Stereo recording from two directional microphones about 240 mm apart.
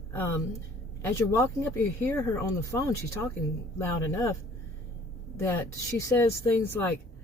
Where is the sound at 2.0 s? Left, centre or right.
Centre.